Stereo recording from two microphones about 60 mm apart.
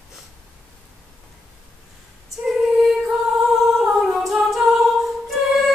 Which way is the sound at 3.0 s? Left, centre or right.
Centre.